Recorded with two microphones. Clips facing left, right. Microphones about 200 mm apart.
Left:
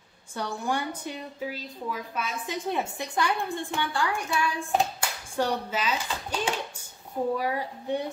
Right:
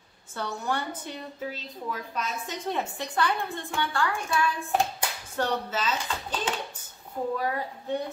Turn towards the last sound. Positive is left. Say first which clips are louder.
# left 1 dB
turn(degrees=15)  # may be behind; listen again after turning